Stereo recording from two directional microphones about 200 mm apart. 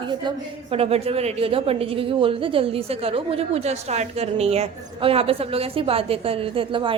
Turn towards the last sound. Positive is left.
turn(degrees=-25)  # may be behind; listen again after turning